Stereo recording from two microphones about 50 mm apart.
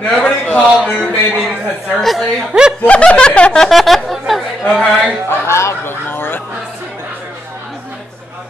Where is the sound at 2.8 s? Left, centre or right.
Left.